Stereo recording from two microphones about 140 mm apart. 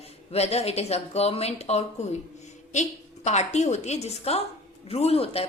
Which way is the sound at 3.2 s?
55° left (ahead or behind).